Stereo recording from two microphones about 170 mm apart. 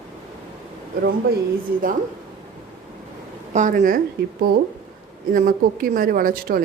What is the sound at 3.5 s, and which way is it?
Speech, 50° right (ahead or behind).